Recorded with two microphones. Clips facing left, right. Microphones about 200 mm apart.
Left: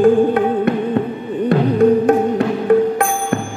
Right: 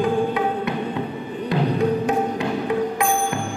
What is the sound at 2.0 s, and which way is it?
Music, 50° left (ahead or behind).